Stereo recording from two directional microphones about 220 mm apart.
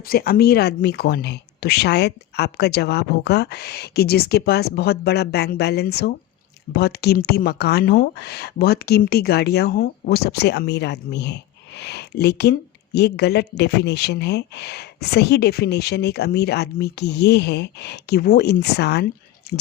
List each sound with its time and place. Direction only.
0.0 s speech: 45° left (ahead or behind)